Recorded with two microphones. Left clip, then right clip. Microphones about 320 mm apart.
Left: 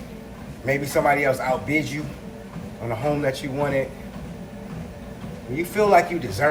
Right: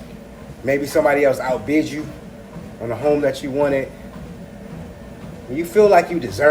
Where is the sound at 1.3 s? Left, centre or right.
Left.